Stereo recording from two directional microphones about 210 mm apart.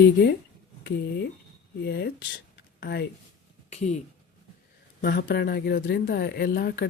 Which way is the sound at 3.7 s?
30° left (ahead or behind).